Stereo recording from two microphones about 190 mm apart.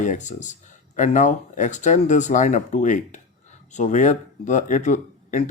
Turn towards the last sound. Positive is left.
turn(degrees=40)  # may be behind; listen again after turning